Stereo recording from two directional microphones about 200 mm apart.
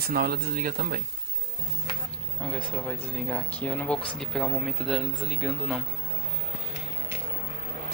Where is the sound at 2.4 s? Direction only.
5° left (ahead or behind).